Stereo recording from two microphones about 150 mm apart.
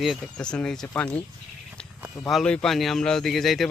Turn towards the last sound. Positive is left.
turn(degrees=0)  # may be behind; listen again after turning